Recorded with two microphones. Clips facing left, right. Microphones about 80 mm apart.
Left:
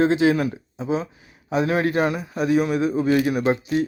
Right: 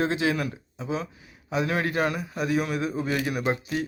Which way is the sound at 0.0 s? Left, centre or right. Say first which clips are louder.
Left 7 dB; left.